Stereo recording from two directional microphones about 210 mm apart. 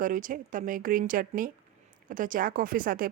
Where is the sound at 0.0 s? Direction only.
40° right (ahead or behind).